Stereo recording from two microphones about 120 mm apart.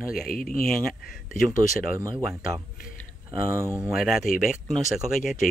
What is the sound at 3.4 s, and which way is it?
Speech, 25° right (ahead or behind).